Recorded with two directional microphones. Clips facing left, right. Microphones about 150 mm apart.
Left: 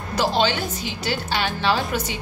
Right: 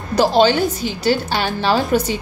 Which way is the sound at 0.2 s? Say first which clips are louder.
Right 8 dB; 40° right (ahead or behind).